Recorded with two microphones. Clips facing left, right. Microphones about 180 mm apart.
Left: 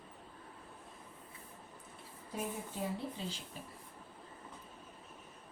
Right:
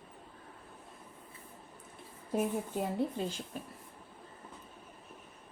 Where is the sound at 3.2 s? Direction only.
55° right (ahead or behind).